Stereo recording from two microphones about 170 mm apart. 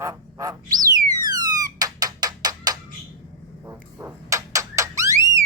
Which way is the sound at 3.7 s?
15° right (ahead or behind).